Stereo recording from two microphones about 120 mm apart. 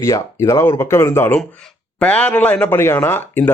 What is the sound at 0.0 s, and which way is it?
Speech, 25° left (ahead or behind).